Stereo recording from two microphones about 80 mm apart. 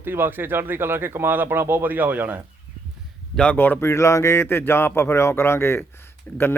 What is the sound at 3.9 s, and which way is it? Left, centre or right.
Speech, left.